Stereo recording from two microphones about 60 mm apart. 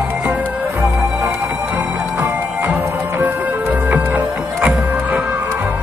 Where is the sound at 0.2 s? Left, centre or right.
Right.